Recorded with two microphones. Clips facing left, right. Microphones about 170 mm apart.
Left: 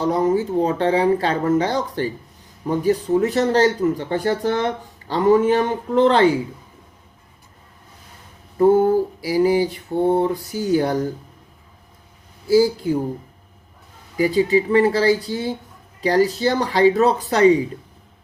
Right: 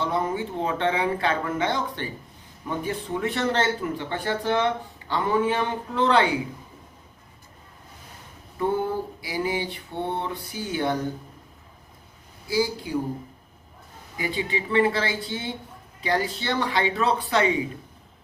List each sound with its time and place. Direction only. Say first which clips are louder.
0.0 s speech: left 8 dB; 40° left (ahead or behind)
8.5 s speech: left 11 dB; 45° left (ahead or behind)
12.5 s speech: left 10 dB; 45° left (ahead or behind)
14.2 s speech: left 12 dB; 40° left (ahead or behind)